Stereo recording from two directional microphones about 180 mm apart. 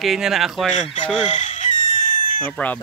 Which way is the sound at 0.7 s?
40° left (ahead or behind).